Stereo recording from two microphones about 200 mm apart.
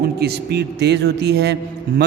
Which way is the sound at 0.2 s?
55° right (ahead or behind).